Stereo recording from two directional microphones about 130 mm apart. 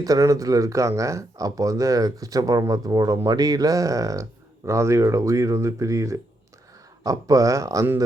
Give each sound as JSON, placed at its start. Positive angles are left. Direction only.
{"t": 0.0, "sound": "speech", "side_deg": -25}